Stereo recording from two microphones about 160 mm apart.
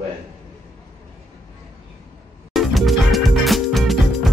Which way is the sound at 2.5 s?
Centre (ahead or behind).